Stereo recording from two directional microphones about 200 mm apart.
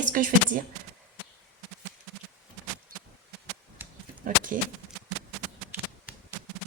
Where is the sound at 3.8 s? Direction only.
10° right (ahead or behind).